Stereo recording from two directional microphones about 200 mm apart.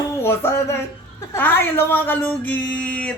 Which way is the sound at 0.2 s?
10° left (ahead or behind).